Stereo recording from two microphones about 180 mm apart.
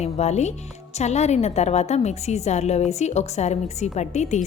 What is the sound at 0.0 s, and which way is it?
A woman's voice, 40° left (ahead or behind).